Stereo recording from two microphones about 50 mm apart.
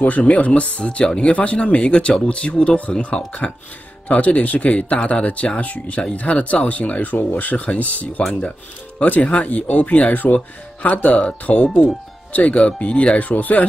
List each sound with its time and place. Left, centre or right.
0.2 s speech: left
9.2 s speech: left